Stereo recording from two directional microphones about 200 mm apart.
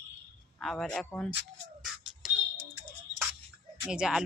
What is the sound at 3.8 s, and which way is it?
Speech, 5° right (ahead or behind).